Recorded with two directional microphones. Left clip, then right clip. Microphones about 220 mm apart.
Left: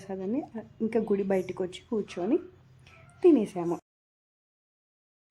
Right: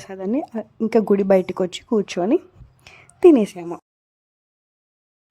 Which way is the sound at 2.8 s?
30° right (ahead or behind).